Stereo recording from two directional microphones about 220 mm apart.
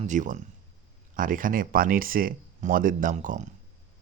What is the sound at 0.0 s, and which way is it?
Speech, 35° right (ahead or behind).